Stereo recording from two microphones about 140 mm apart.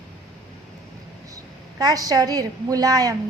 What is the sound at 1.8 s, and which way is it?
A woman's voice, 25° right (ahead or behind).